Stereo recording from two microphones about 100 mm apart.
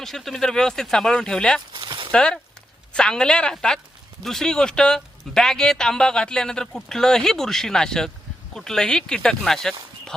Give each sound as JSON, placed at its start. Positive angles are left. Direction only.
{"t": 0.0, "sound": "speech", "side_deg": 5}
{"t": 1.7, "sound": "a sound", "side_deg": -50}
{"t": 2.1, "sound": "a woman's voice", "side_deg": 10}